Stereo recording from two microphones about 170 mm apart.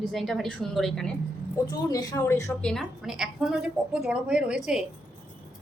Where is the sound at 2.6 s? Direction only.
5° left (ahead or behind).